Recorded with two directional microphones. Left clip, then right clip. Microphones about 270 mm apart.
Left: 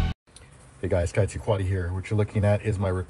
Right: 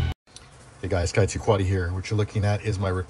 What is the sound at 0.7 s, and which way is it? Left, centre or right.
Speech, centre.